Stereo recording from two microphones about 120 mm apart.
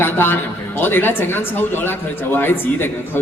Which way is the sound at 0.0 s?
20° left (ahead or behind).